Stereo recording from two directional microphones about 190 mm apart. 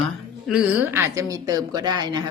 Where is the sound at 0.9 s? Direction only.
15° right (ahead or behind).